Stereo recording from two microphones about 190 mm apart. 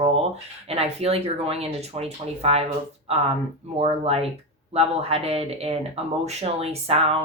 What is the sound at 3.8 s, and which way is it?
Speech, 30° right (ahead or behind).